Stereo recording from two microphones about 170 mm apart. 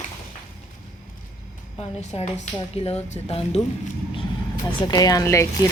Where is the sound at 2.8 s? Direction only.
40° left (ahead or behind).